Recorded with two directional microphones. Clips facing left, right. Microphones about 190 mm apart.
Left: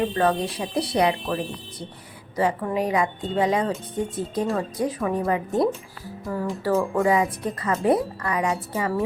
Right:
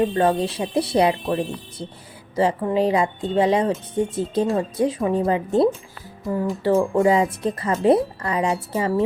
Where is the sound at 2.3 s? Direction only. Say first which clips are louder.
Right 4 dB; 25° right (ahead or behind).